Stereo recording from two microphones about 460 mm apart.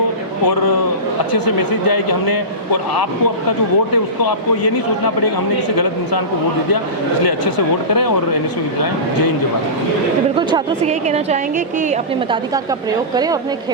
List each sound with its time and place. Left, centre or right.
1.9 s a man's voice: left
3.9 s a man's voice: left
10.3 s a woman's voice: centre